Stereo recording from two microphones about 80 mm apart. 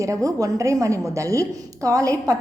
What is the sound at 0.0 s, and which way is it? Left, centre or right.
A woman's voice, right.